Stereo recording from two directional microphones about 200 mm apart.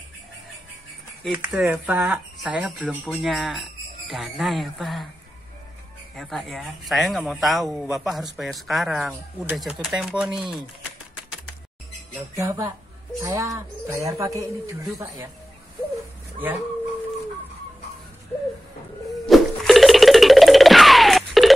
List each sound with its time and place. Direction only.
1.2 s speech: 5° right (ahead or behind)
6.1 s speech: centre (ahead or behind)
12.4 s speech: 15° right (ahead or behind)
19.2 s music: centre (ahead or behind)